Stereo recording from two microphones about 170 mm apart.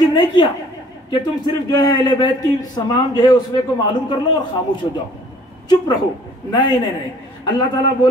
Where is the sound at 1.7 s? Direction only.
25° left (ahead or behind).